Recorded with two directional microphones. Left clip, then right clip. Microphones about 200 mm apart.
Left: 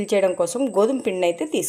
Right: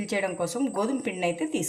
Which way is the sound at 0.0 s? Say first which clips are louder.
Left 9 dB; 35° left (ahead or behind).